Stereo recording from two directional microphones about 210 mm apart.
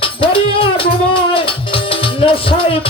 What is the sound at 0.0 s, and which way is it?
Music, 25° left (ahead or behind).